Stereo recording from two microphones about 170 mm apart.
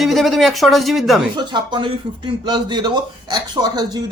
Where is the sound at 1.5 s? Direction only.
25° right (ahead or behind).